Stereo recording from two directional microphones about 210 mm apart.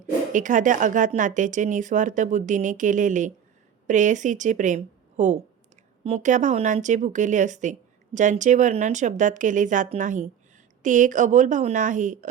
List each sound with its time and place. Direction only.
0.3 s speech: 35° right (ahead or behind)